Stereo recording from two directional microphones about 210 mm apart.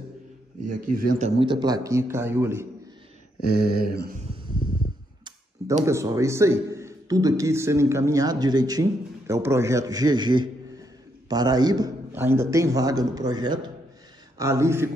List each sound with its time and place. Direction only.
0.7 s speech: 40° right (ahead or behind)
1.4 s a man's voice: 20° right (ahead or behind)
3.5 s a sound: 50° right (ahead or behind)
5.9 s a man's voice: 15° right (ahead or behind)